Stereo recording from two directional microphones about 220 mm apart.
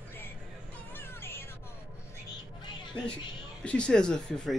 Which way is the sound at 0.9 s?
10° left (ahead or behind).